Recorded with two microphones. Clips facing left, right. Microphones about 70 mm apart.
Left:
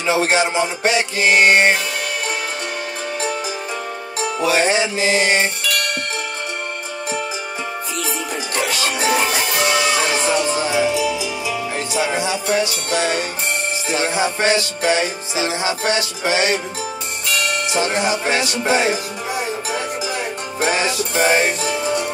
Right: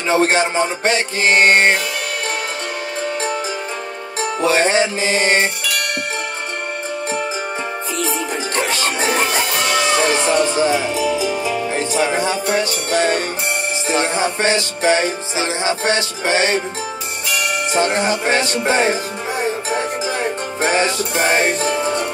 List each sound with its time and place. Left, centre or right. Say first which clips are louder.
0.0 s music: right 2 dB; right
4.5 s music: right 2 dB; right
8.6 s music: left 2 dB; right
14.2 s music: even; right
17.7 s music: right 3 dB; right
20.6 s music: right 2 dB; right